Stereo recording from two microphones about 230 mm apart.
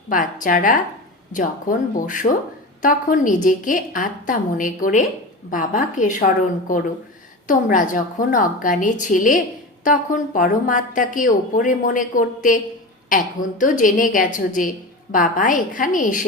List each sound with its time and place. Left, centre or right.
0.1 s a woman's voice: left